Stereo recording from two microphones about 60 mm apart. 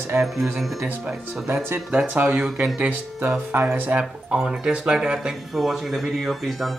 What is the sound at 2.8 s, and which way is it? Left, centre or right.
Speech, right.